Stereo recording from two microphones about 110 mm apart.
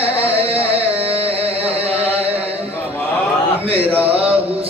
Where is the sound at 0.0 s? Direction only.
60° right (ahead or behind).